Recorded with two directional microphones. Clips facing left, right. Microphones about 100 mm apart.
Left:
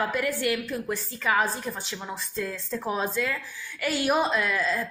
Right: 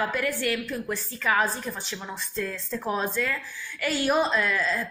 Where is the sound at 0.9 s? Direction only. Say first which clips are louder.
Even; 5° left (ahead or behind).